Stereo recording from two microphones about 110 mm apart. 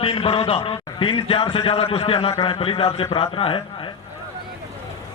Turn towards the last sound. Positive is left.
turn(degrees=55)  # may be behind; listen again after turning